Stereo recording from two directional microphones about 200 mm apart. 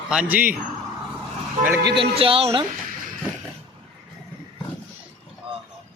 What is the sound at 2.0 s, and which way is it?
Speech, 25° right (ahead or behind).